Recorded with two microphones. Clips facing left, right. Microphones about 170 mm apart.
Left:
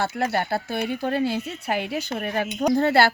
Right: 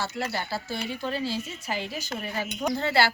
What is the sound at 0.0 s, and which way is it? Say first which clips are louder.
A woman's voice: left 7 dB; 55° left (ahead or behind).